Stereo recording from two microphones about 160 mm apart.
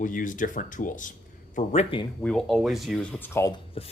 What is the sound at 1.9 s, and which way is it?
Speech, 35° left (ahead or behind).